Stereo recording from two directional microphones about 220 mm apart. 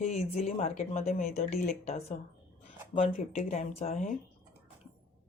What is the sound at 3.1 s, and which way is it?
Speech, 35° left (ahead or behind).